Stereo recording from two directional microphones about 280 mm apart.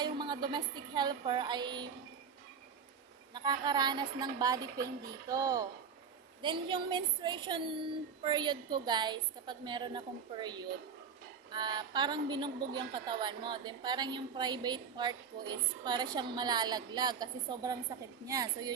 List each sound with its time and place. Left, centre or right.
0.0 s music: centre
3.3 s a woman's voice: centre